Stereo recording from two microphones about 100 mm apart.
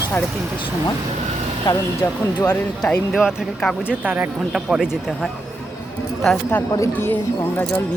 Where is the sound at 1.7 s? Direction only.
40° left (ahead or behind).